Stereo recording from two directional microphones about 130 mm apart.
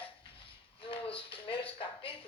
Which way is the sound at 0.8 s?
45° left (ahead or behind).